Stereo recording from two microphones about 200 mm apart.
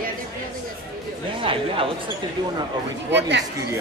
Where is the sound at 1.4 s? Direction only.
25° right (ahead or behind).